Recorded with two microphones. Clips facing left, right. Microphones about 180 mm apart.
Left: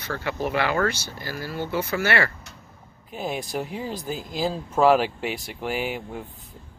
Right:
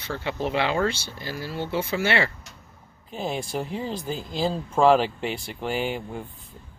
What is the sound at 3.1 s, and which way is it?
Speech, 5° left (ahead or behind).